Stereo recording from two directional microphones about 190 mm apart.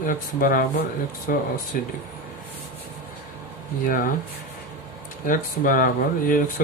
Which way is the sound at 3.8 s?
45° left (ahead or behind).